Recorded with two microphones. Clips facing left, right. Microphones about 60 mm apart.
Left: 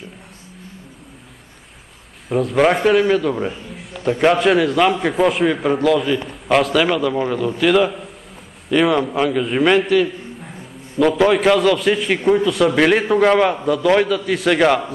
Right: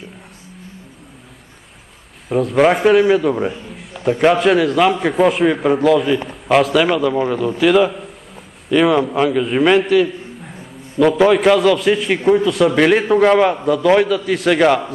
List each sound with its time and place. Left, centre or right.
2.2 s a man's voice: centre